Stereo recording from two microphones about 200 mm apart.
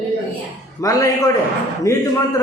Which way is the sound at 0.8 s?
15° left (ahead or behind).